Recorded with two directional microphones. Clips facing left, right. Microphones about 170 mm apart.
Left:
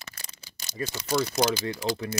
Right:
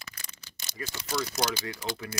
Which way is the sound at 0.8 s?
30° left (ahead or behind).